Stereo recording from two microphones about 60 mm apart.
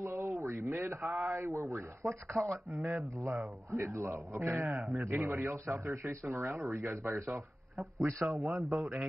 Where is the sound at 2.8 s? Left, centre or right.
Right.